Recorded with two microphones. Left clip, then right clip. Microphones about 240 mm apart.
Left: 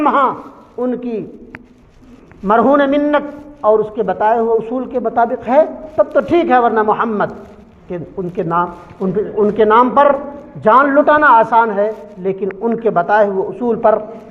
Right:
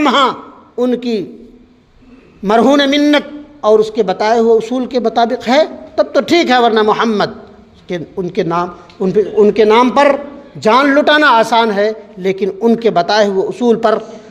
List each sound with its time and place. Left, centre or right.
0.0 s a man's voice: right
2.5 s a man's voice: right